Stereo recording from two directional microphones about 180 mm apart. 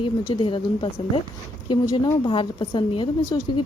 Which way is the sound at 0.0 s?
30° left (ahead or behind).